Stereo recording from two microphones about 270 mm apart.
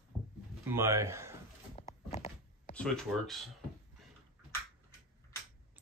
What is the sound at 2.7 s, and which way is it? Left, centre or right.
Speech, centre.